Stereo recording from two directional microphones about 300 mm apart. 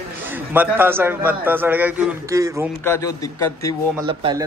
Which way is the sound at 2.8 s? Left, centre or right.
Centre.